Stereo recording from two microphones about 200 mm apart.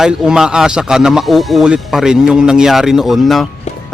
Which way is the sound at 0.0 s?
5° right (ahead or behind).